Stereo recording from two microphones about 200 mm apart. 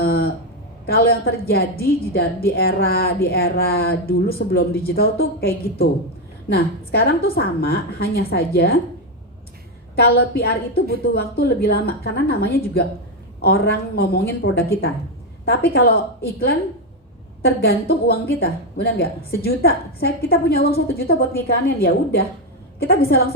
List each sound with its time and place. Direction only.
0.0 s a sound: 50° left (ahead or behind)
0.9 s a woman's voice: 50° left (ahead or behind)
9.9 s a woman's voice: 50° left (ahead or behind)
17.4 s a woman's voice: 50° left (ahead or behind)